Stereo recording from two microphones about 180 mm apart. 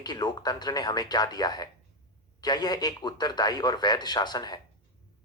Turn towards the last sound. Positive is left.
turn(degrees=20)  # may be behind; listen again after turning